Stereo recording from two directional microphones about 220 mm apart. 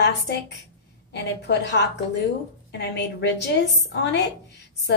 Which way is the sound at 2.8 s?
50° left (ahead or behind).